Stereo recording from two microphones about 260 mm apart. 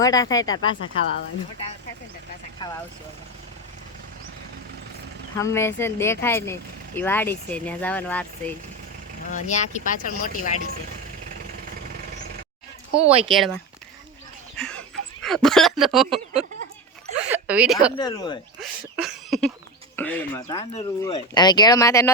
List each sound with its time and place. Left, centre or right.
0.0 s speech: centre
5.4 s speech: centre
9.3 s speech: left
12.9 s speech: right
13.2 s speech: centre
14.6 s a sound: centre
17.9 s speech: centre
18.6 s cough: centre
20.0 s speech: centre